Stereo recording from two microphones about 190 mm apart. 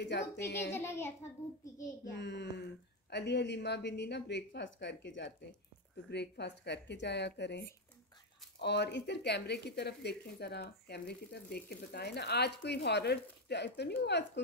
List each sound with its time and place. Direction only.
0.0 s speech: 65° left (ahead or behind)
0.7 s a child's voice: 15° left (ahead or behind)
2.1 s speech: 65° left (ahead or behind)